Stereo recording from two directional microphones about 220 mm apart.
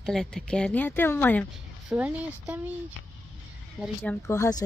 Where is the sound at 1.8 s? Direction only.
5° right (ahead or behind).